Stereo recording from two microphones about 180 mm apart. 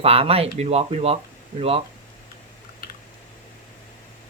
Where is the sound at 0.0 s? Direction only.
35° right (ahead or behind).